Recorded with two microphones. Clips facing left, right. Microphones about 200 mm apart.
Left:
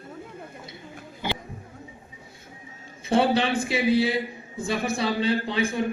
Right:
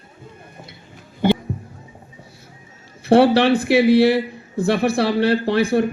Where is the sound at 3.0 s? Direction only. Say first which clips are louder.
Right 8 dB; 70° right (ahead or behind).